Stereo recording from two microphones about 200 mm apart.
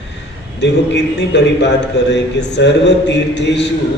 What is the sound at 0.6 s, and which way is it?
A man's voice, 60° left (ahead or behind).